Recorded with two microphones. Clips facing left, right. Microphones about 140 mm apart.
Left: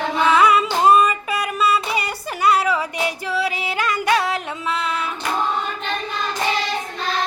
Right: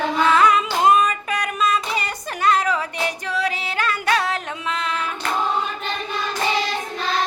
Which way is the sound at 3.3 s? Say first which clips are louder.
Left 1 dB; 10° left (ahead or behind).